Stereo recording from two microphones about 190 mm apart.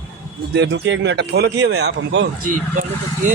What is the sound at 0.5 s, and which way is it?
Speech, 65° right (ahead or behind).